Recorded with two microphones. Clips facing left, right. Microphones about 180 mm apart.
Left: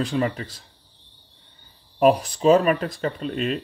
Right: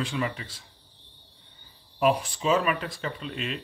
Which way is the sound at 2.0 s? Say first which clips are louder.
Left 6 dB; 40° left (ahead or behind).